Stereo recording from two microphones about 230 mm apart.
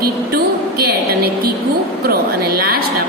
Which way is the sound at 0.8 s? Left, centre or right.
Right.